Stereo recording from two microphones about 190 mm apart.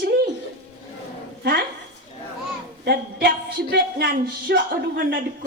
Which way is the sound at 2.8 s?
55° right (ahead or behind).